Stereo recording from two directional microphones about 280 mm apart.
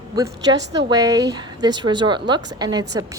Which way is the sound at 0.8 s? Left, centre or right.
Centre.